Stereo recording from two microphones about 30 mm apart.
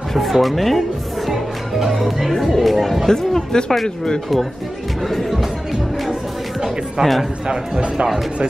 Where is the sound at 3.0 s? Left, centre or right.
Centre.